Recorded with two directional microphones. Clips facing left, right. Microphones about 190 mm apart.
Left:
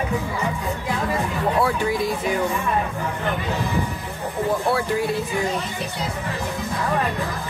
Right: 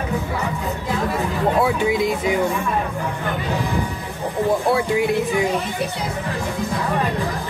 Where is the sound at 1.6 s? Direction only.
20° right (ahead or behind).